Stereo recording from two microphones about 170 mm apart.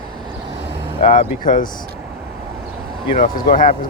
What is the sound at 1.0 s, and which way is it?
Speech, 50° left (ahead or behind).